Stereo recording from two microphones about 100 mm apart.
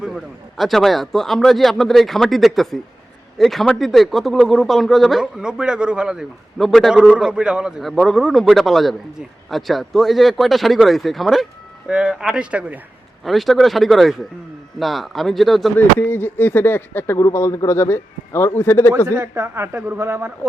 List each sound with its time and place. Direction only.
0.0 s speech: centre (ahead or behind)
13.2 s speech: centre (ahead or behind)
16.0 s speech: 20° left (ahead or behind)
19.0 s a man's voice: 30° right (ahead or behind)